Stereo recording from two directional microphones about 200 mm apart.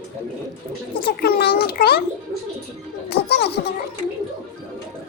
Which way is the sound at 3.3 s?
55° left (ahead or behind).